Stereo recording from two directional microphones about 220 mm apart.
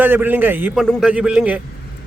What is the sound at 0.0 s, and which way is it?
A man's voice, 10° right (ahead or behind).